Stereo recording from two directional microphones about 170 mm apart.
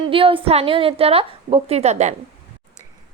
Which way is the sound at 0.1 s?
30° right (ahead or behind).